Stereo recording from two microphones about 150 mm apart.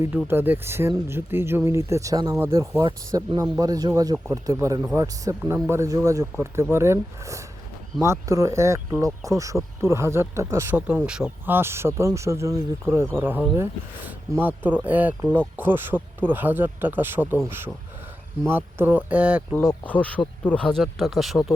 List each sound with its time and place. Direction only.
0.3 s speech: 15° right (ahead or behind)
10.8 s speech: 5° right (ahead or behind)
18.4 s speech: 15° right (ahead or behind)
19.8 s speech: 10° left (ahead or behind)